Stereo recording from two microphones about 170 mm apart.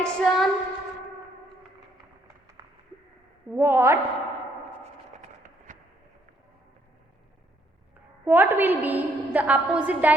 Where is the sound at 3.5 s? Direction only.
15° right (ahead or behind).